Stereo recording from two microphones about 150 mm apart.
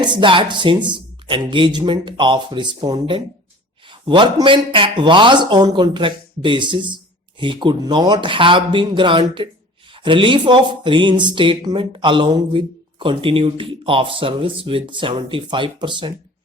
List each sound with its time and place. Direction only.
0.0 s speech: 30° right (ahead or behind)